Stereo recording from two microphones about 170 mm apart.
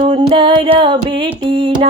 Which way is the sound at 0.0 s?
35° right (ahead or behind).